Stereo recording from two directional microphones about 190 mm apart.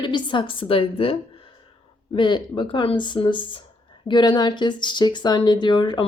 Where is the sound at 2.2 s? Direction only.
25° left (ahead or behind).